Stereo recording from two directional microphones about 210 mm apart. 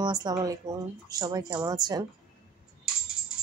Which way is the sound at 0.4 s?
15° right (ahead or behind).